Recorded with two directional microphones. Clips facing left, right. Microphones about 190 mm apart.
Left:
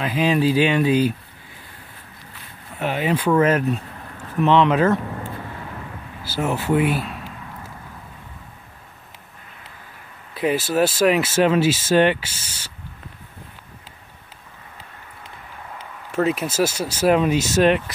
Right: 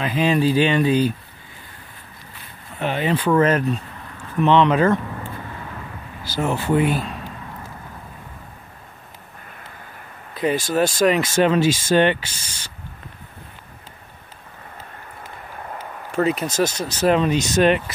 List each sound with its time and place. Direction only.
0.0 s speech: 5° left (ahead or behind)
2.8 s speech: 5° left (ahead or behind)
6.2 s speech: 5° left (ahead or behind)
10.3 s speech: 5° left (ahead or behind)
14.8 s a sound: 50° right (ahead or behind)
16.1 s speech: centre (ahead or behind)